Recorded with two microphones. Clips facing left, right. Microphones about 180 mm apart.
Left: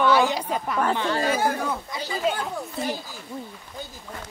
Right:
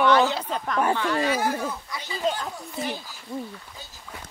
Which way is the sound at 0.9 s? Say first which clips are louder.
Even; 25° left (ahead or behind).